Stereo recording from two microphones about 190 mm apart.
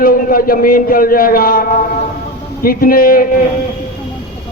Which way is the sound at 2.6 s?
50° left (ahead or behind).